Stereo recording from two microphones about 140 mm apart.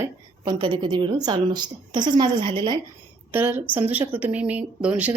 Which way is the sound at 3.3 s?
15° right (ahead or behind).